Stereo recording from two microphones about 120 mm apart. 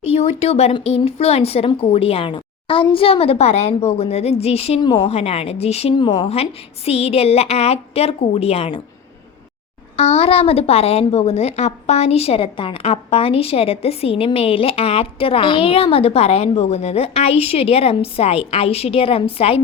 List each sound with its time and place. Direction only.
0.0 s a woman's voice: 60° left (ahead or behind)
4.8 s a woman's voice: 40° left (ahead or behind)
5.0 s a woman's voice: 60° left (ahead or behind)
10.0 s a woman's voice: 55° left (ahead or behind)